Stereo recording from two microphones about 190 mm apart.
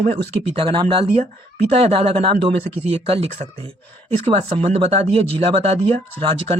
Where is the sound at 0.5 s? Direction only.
25° right (ahead or behind).